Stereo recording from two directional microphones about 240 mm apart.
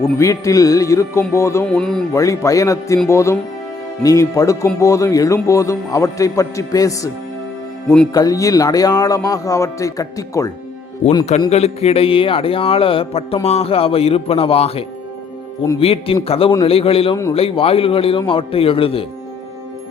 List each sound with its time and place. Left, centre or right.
0.2 s speech: centre
2.1 s speech: centre